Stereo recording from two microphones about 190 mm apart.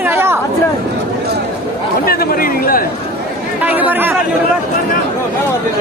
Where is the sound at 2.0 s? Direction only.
50° left (ahead or behind).